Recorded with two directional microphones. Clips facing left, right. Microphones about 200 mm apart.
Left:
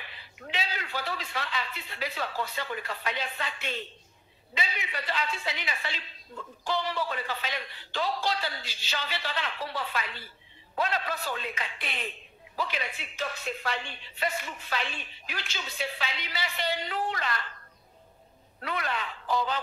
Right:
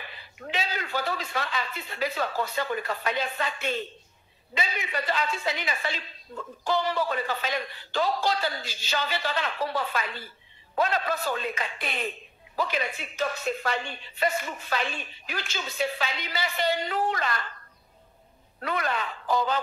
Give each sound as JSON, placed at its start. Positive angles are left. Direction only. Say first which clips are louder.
{"t": 0.0, "sound": "a man's voice", "louder": "right 4 dB", "side_deg": -45}
{"t": 18.6, "sound": "a man's voice", "louder": "right 4 dB", "side_deg": -45}